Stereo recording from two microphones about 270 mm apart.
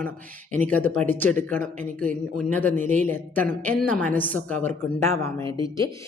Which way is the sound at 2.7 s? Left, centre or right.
Right.